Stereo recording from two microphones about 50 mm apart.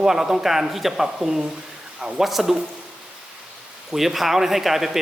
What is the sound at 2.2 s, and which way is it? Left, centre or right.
Speech, centre.